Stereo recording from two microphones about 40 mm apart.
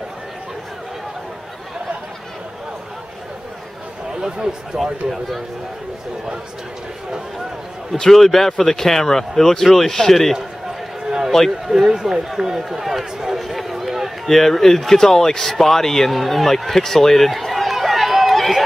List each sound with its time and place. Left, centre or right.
4.1 s a sound: centre
4.8 s speech: centre
8.0 s speech: centre
11.1 s run: centre
11.6 s speech: centre
14.3 s speech: centre